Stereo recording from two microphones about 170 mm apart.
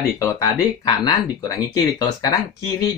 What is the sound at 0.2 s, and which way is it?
Speech, 20° left (ahead or behind).